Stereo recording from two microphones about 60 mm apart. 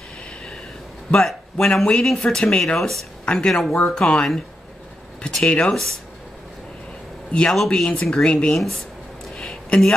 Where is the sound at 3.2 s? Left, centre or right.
Centre.